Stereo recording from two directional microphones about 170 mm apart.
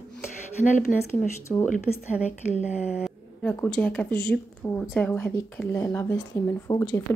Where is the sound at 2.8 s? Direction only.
5° right (ahead or behind).